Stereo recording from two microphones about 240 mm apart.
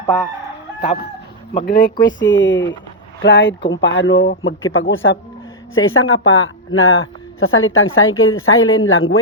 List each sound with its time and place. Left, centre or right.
1.6 s speech: left
2.1 s speech: left